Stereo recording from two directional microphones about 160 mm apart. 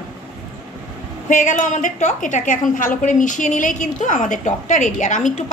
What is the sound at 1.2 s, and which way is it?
A woman's voice, 55° left (ahead or behind).